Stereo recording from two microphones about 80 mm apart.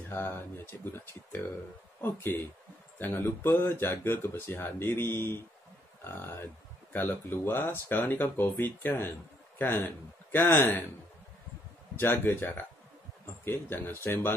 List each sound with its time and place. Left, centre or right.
0.1 s speech: left
12.0 s speech: left